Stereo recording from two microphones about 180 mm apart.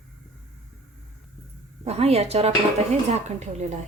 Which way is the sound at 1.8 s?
35° right (ahead or behind).